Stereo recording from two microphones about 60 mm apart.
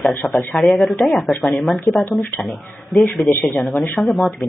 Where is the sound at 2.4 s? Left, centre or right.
Centre.